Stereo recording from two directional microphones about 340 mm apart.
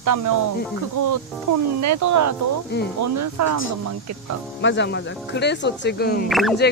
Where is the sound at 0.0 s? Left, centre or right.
Right.